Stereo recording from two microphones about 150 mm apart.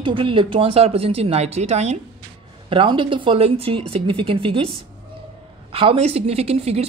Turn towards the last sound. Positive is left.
turn(degrees=-45)  # may be behind; listen again after turning